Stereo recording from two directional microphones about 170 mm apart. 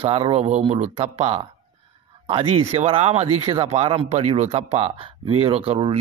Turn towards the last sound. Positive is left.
turn(degrees=-35)  # may be behind; listen again after turning